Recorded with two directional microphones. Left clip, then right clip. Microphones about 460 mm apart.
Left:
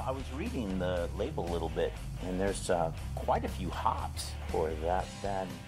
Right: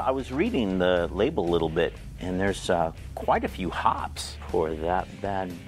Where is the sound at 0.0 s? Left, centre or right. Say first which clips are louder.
Right 11 dB; right.